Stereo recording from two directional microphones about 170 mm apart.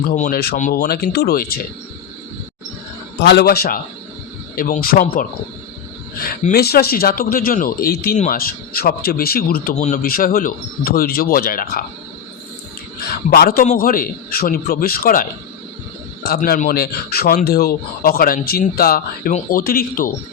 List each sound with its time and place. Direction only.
0.2 s speech: 65° left (ahead or behind)
3.2 s speech: 70° left (ahead or behind)
6.5 s speech: 65° left (ahead or behind)
9.7 s speech: 45° left (ahead or behind)
13.1 s a man's voice: 60° left (ahead or behind)